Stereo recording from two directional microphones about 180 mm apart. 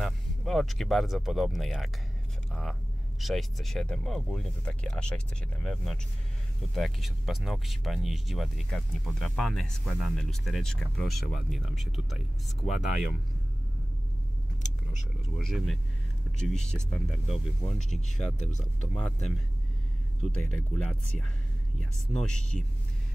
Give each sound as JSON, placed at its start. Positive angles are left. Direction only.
{"t": 0.0, "sound": "speech", "side_deg": 0}
{"t": 14.6, "sound": "vehicle", "side_deg": 40}
{"t": 15.3, "sound": "speech", "side_deg": 0}
{"t": 20.2, "sound": "speech", "side_deg": 5}